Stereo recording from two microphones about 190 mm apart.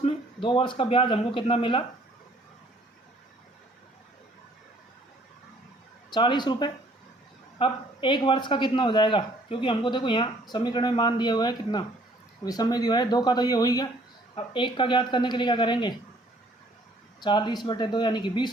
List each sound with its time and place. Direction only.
0.0 s a man's voice: 30° left (ahead or behind)
6.1 s a man's voice: 25° left (ahead or behind)
17.2 s a man's voice: 25° left (ahead or behind)